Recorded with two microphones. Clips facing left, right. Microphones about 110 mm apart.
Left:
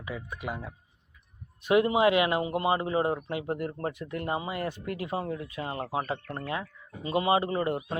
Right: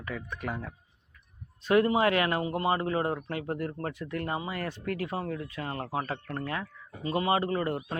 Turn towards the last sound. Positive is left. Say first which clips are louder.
# left 1 dB
turn(degrees=20)  # may be behind; listen again after turning